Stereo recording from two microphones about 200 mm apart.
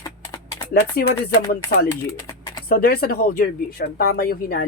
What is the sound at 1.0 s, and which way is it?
Speech, 50° left (ahead or behind).